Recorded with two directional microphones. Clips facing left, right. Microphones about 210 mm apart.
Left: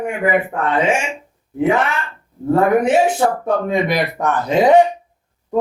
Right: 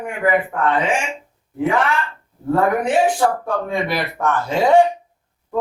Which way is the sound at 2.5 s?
25° left (ahead or behind).